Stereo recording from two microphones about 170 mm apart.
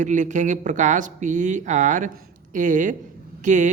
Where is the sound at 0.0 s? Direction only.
50° right (ahead or behind).